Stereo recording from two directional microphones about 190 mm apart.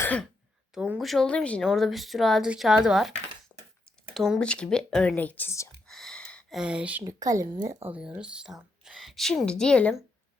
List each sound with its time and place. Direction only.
0.0 s speech: 5° left (ahead or behind)
0.7 s speech: 5° right (ahead or behind)
4.1 s speech: centre (ahead or behind)
5.9 s a sound: centre (ahead or behind)
7.0 s speech: 20° right (ahead or behind)
7.9 s speech: 5° right (ahead or behind)